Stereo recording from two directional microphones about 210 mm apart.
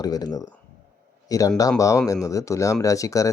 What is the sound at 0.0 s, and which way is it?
Speech, 20° left (ahead or behind).